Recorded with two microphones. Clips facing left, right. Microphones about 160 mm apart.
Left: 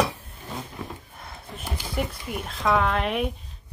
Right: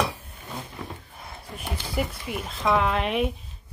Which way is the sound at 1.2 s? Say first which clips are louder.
Even; 5° right (ahead or behind).